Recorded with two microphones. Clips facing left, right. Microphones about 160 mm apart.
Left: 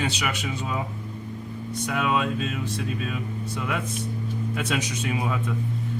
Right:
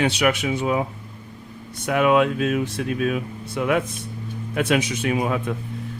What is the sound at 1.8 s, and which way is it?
Speech, 60° right (ahead or behind).